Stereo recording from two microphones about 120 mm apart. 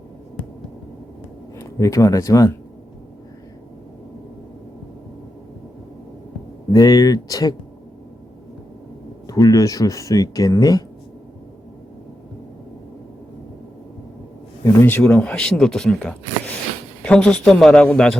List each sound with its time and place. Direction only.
1.5 s speech: 25° left (ahead or behind)
6.7 s speech: 30° left (ahead or behind)
9.2 s speech: 30° left (ahead or behind)
14.6 s speech: 25° left (ahead or behind); by 18.2 s 5° left (ahead or behind)